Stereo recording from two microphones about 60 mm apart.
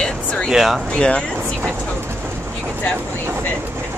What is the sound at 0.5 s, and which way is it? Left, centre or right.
Speech, centre.